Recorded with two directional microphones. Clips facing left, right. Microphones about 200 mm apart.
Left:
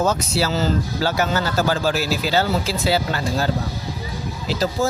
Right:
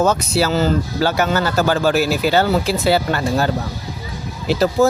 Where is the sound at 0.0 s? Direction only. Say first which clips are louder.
Right 4 dB; 60° right (ahead or behind).